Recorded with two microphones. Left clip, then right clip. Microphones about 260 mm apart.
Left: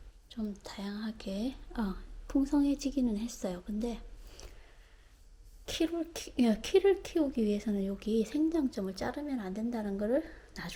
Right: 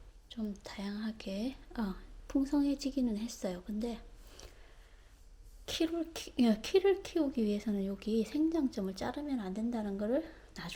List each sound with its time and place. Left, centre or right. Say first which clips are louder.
0.3 s speech: left 1 dB; centre
5.6 s speech: left 1 dB; centre